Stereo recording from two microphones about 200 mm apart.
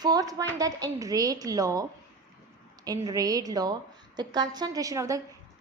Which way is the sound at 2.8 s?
20° right (ahead or behind).